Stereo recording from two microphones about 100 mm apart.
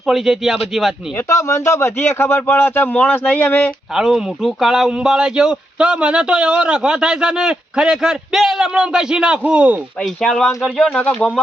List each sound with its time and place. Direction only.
0.0 s a man's voice: centre (ahead or behind)
1.1 s speech: 30° left (ahead or behind)
3.9 s a man's voice: centre (ahead or behind)
10.0 s a man's voice: centre (ahead or behind)